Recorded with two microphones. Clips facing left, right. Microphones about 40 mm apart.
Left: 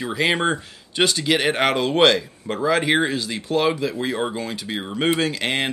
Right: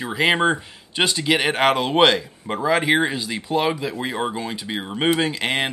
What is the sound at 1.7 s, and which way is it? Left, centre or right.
Speech, right.